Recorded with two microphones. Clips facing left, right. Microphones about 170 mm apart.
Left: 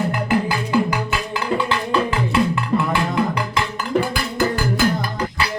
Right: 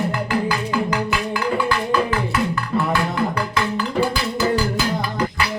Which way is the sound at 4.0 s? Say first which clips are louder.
Even; 55° left (ahead or behind).